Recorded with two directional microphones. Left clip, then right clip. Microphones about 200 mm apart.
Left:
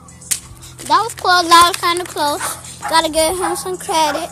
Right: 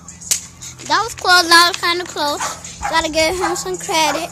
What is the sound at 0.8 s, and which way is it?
A woman's voice, 5° left (ahead or behind).